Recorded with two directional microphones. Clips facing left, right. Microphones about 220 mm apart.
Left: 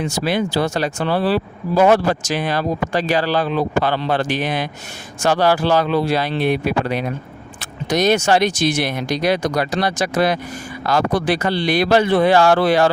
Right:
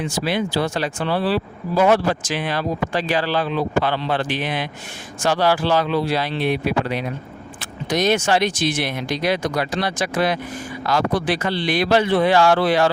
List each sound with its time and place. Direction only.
0.0 s speech: 40° left (ahead or behind)